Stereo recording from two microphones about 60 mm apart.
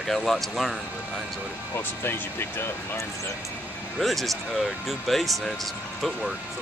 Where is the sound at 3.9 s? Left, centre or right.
Centre.